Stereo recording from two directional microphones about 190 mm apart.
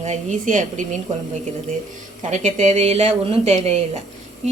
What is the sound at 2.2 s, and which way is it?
A woman's voice, 40° right (ahead or behind).